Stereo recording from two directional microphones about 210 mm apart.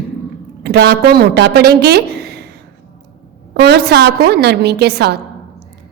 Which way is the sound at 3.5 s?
50° right (ahead or behind).